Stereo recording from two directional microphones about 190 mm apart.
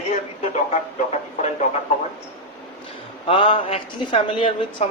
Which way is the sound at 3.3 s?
25° left (ahead or behind).